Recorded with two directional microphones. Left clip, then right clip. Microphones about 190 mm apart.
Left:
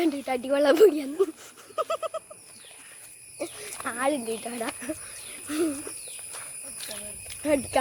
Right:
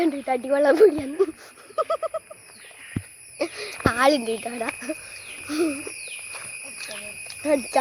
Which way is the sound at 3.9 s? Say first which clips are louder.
Right 8 dB; 10° right (ahead or behind).